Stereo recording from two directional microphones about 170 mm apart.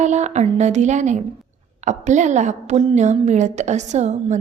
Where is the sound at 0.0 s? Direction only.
45° right (ahead or behind).